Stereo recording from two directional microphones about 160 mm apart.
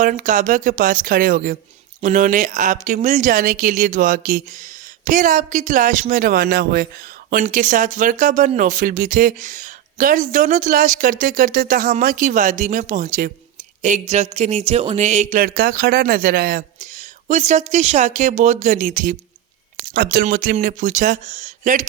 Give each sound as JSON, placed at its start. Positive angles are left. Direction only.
{"t": 0.0, "sound": "speech", "side_deg": -55}
{"t": 2.0, "sound": "speech", "side_deg": -45}
{"t": 7.3, "sound": "speech", "side_deg": -55}
{"t": 17.2, "sound": "speech", "side_deg": -50}
{"t": 19.9, "sound": "speech", "side_deg": -70}
{"t": 20.2, "sound": "speech", "side_deg": -60}